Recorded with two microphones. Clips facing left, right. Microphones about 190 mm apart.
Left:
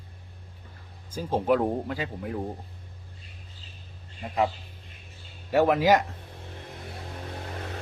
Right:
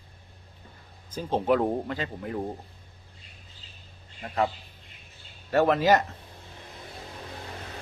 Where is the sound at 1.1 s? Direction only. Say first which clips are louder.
Even; 5° left (ahead or behind).